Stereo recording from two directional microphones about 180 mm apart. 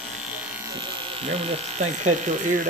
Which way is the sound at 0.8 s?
30° right (ahead or behind).